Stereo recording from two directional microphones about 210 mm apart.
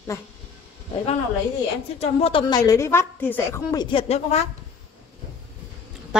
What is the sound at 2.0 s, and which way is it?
A woman's voice, 30° left (ahead or behind).